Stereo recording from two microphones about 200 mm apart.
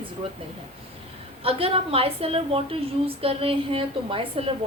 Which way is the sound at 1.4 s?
30° right (ahead or behind).